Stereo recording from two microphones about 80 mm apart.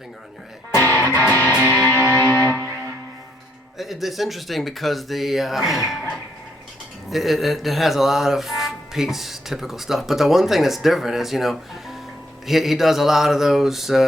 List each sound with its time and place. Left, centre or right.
0.7 s music: left
2.1 s music: left
3.8 s speech: centre
7.1 s speech: centre